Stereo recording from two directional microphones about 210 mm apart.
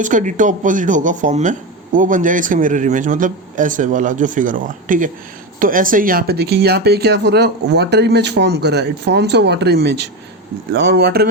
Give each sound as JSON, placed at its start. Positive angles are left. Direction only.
{"t": 0.0, "sound": "speech", "side_deg": -35}